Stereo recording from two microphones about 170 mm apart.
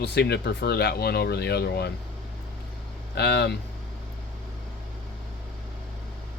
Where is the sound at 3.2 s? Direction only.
75° left (ahead or behind).